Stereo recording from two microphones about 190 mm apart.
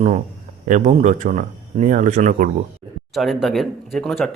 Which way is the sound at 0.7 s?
40° right (ahead or behind).